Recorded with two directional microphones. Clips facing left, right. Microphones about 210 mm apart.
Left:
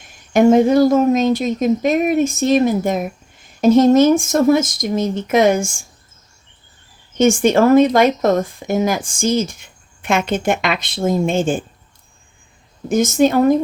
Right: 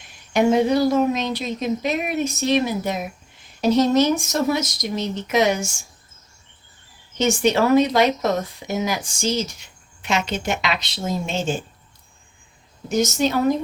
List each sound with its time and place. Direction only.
0.3 s speech: 45° left (ahead or behind)
7.2 s speech: 50° left (ahead or behind)
12.9 s speech: 50° left (ahead or behind)